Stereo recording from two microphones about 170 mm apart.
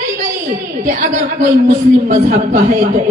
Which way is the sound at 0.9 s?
50° right (ahead or behind).